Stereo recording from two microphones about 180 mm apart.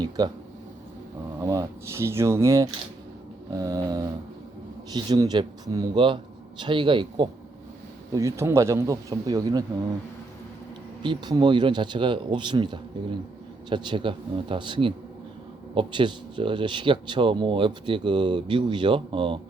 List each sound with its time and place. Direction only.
0.2 s speech: 20° right (ahead or behind)
1.4 s speech: 15° right (ahead or behind)
8.1 s speech: 15° right (ahead or behind)
11.0 s speech: 25° right (ahead or behind)